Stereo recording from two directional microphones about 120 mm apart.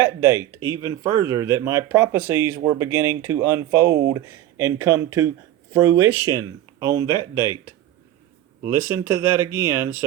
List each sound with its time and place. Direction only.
0.0 s speech: 25° right (ahead or behind)
9.0 s speech: 20° right (ahead or behind)